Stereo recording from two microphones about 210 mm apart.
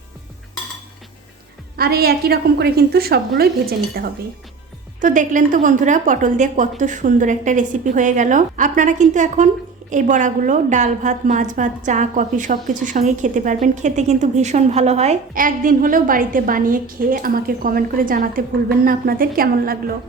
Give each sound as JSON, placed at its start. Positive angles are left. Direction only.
{"t": 1.7, "sound": "a woman's voice", "side_deg": -50}